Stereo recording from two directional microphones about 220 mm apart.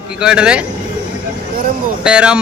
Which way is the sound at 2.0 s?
5° right (ahead or behind).